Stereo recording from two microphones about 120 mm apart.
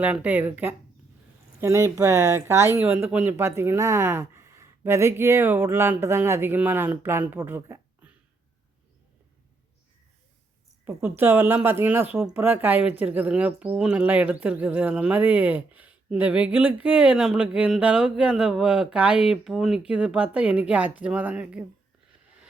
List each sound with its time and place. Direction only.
0.0 s speech: 15° right (ahead or behind)
11.2 s speech: 15° right (ahead or behind)